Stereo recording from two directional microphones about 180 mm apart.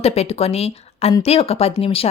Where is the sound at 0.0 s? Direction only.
35° left (ahead or behind).